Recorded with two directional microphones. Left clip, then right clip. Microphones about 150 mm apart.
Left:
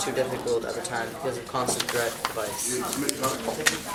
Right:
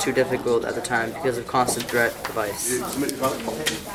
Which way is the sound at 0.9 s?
25° right (ahead or behind).